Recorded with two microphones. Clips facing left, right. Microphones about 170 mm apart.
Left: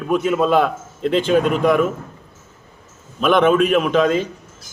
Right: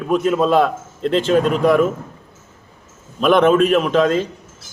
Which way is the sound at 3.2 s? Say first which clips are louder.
Right 2 dB; centre (ahead or behind).